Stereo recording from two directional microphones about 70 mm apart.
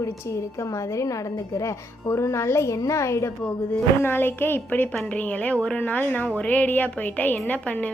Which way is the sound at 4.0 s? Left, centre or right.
Left.